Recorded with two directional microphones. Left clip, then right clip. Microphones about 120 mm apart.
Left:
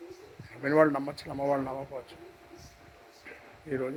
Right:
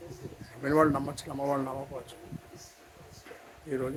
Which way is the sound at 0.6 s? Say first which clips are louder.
Left 1 dB; 25° right (ahead or behind).